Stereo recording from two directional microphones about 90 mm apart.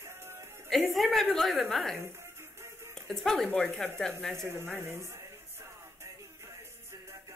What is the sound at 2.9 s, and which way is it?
Speech, 5° left (ahead or behind).